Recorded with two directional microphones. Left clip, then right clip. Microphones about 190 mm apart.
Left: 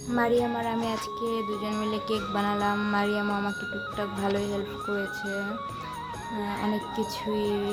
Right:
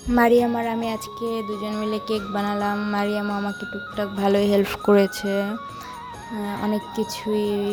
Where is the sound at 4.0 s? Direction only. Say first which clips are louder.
Right 9 dB; 35° right (ahead or behind).